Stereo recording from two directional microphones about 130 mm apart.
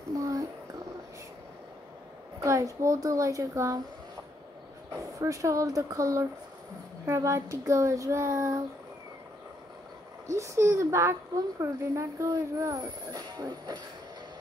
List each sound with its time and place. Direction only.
0.2 s a sound: 25° right (ahead or behind)
2.4 s speech: 25° right (ahead or behind)
4.9 s speech: 25° right (ahead or behind)
10.2 s speech: 25° right (ahead or behind)